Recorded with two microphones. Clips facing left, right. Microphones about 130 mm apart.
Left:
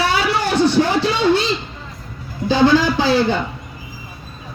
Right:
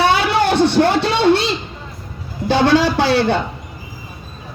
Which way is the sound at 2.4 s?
65° right (ahead or behind).